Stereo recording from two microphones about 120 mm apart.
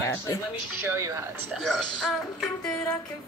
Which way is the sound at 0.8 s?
25° right (ahead or behind).